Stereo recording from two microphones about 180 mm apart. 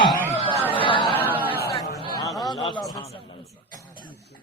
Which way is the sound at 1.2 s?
10° right (ahead or behind).